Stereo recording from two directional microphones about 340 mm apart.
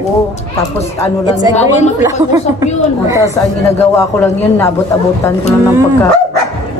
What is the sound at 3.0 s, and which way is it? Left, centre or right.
Speech, centre.